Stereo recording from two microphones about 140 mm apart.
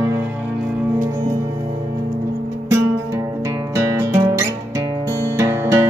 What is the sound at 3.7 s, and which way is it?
Music, 20° right (ahead or behind).